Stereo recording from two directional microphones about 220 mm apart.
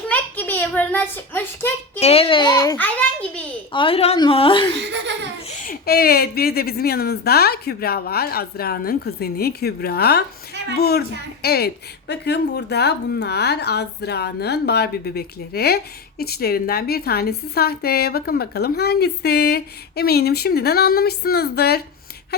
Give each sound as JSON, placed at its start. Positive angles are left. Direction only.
{"t": 0.1, "sound": "a sound", "side_deg": 10}
{"t": 2.0, "sound": "a child's voice", "side_deg": 25}
{"t": 3.7, "sound": "a woman's voice", "side_deg": 25}
{"t": 4.8, "sound": "laughter", "side_deg": -50}
{"t": 5.5, "sound": "a woman's voice", "side_deg": 40}